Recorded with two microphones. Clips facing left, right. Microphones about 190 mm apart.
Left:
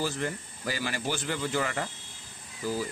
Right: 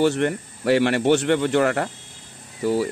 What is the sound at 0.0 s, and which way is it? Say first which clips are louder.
Speech: right 12 dB; 70° right (ahead or behind).